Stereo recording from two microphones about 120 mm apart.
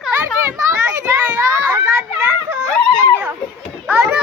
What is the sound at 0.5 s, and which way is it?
Children playing, 25° right (ahead or behind).